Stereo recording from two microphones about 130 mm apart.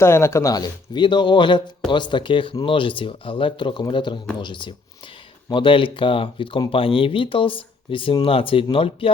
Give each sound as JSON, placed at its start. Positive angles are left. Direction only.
{"t": 0.0, "sound": "speech", "side_deg": 20}